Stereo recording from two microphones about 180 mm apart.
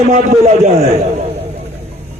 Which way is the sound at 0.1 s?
40° right (ahead or behind).